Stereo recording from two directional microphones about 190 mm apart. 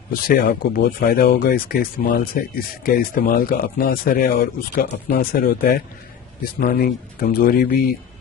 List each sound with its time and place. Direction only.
0.1 s speech: 50° left (ahead or behind)